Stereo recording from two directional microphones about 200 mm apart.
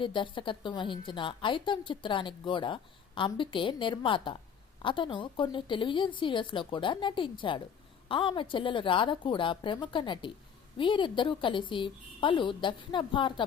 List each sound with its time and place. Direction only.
0.0 s a woman's voice: 25° left (ahead or behind)